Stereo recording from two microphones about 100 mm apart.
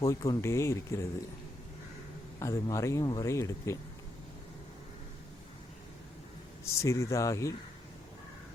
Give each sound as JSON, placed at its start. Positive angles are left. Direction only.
{"t": 0.0, "sound": "speech", "side_deg": 35}
{"t": 2.4, "sound": "speech", "side_deg": 35}
{"t": 6.7, "sound": "speech", "side_deg": 30}